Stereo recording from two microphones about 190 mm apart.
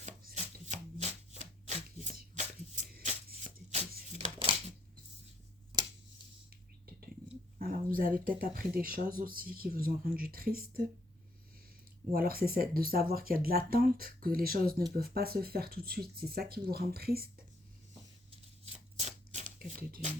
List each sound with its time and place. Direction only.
0.0 s a sound: 40° right (ahead or behind)
7.6 s speech: 50° right (ahead or behind)
12.1 s speech: 50° right (ahead or behind)
18.3 s shuffling cards: 35° right (ahead or behind)